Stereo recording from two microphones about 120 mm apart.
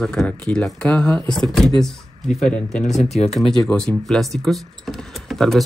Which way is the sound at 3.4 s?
5° left (ahead or behind).